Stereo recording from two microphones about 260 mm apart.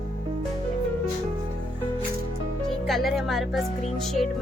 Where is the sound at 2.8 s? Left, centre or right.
Centre.